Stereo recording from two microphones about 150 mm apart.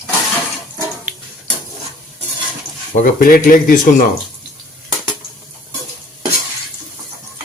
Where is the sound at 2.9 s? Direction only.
70° left (ahead or behind).